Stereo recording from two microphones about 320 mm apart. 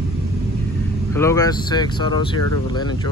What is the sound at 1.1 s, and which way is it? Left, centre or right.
Speech, centre.